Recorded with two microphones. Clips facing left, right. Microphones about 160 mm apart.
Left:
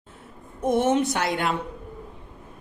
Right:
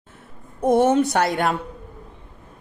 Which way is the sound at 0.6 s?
35° right (ahead or behind).